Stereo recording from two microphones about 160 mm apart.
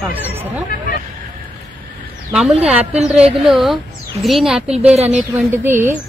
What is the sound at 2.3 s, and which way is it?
A woman's voice, 5° right (ahead or behind).